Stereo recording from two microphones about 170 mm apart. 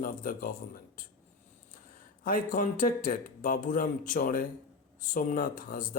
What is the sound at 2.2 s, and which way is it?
Speech, 55° left (ahead or behind).